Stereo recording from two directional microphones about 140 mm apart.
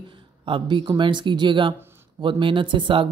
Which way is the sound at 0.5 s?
35° right (ahead or behind).